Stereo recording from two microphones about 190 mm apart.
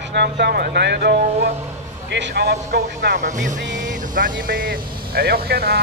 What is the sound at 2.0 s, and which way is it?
Speech, 65° right (ahead or behind).